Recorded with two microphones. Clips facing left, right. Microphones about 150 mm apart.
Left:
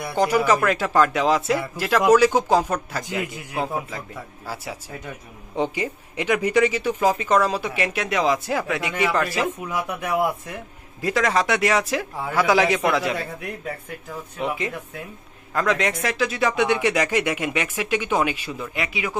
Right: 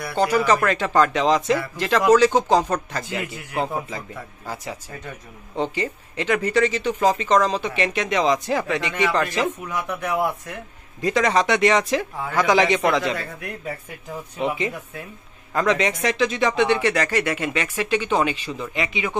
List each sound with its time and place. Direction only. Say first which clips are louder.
0.0 s speech: even; 15° left (ahead or behind)
3.5 s speech: right 1 dB; centre (ahead or behind)
14.4 s speech: right 2 dB; centre (ahead or behind)